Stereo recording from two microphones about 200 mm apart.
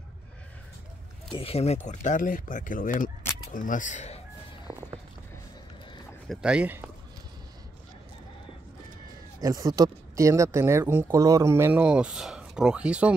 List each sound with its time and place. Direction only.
1.3 s speech: 30° left (ahead or behind)
4.7 s music: 5° right (ahead or behind)
6.2 s speech: 5° right (ahead or behind)
9.4 s speech: 15° right (ahead or behind)